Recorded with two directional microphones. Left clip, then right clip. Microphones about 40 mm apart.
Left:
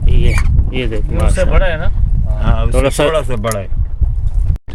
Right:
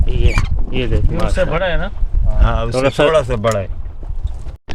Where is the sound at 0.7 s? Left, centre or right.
Left.